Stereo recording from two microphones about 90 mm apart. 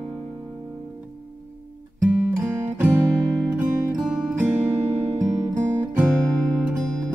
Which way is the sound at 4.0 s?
10° right (ahead or behind).